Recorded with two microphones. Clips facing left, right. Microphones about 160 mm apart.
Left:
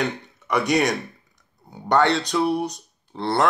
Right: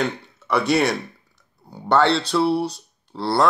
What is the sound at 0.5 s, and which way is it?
Speech, 15° left (ahead or behind).